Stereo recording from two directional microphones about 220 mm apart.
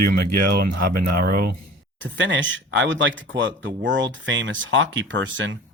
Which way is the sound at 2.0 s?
60° right (ahead or behind).